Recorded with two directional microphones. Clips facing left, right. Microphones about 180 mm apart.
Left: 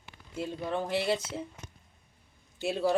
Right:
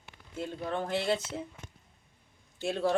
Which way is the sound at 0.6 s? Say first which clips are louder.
Left 1 dB; 10° left (ahead or behind).